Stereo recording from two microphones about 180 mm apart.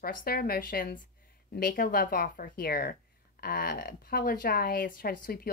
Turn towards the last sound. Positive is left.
turn(degrees=55)  # may be behind; listen again after turning